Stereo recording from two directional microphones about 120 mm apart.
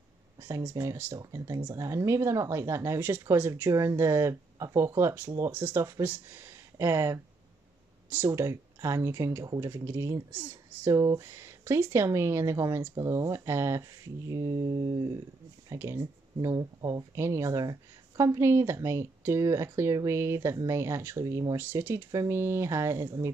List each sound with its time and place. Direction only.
0.4 s speech: 25° right (ahead or behind)
23.0 s speech: 35° right (ahead or behind)